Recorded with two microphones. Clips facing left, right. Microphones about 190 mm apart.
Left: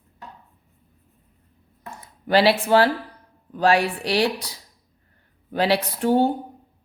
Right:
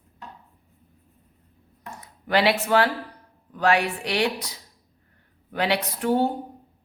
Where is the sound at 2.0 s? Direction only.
30° left (ahead or behind).